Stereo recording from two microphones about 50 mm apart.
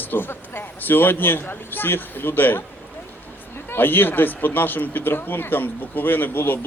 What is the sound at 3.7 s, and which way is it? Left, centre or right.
A man's voice, left.